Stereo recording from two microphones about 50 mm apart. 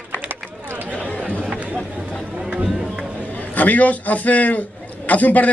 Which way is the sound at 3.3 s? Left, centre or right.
Left.